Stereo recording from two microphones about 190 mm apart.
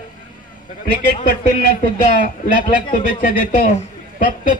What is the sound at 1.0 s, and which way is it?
Speech, 50° left (ahead or behind).